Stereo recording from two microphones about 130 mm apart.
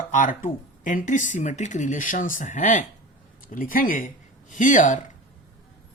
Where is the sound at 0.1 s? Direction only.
85° left; by 2.8 s 70° left (ahead or behind).